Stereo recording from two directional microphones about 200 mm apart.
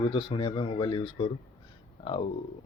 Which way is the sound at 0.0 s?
25° left (ahead or behind).